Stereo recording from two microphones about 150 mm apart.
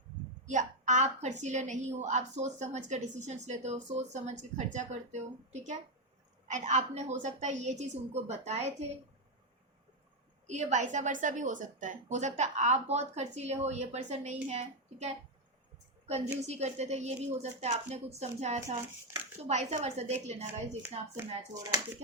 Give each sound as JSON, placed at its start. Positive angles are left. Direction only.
{"t": 0.4, "sound": "a woman's voice", "side_deg": -55}
{"t": 10.4, "sound": "a woman's voice", "side_deg": -50}
{"t": 21.2, "sound": "speech", "side_deg": -25}